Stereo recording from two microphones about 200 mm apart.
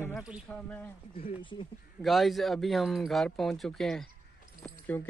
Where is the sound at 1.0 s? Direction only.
25° left (ahead or behind).